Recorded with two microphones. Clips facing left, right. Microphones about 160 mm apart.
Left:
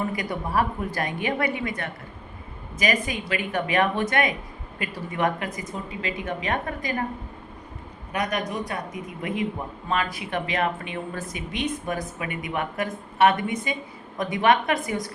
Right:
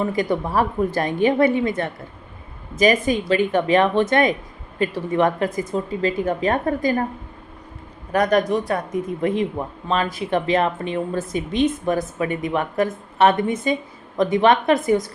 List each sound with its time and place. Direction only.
0.2 s a woman's voice: 30° right (ahead or behind)
8.1 s a woman's voice: 35° right (ahead or behind)